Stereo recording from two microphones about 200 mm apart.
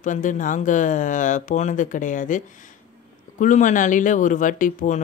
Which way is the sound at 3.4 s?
40° left (ahead or behind).